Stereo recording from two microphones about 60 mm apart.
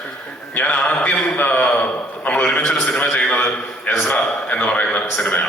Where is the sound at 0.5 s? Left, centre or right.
Left.